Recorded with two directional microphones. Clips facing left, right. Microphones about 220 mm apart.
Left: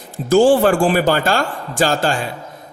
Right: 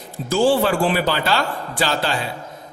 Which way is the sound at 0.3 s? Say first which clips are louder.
Left 5 dB; 50° left (ahead or behind).